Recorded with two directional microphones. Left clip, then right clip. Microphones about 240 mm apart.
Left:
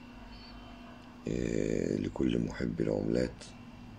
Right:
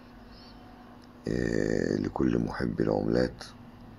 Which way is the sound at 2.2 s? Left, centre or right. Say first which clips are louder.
Right 4 dB; centre.